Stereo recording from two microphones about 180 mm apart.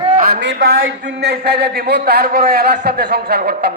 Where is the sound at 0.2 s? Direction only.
65° right (ahead or behind).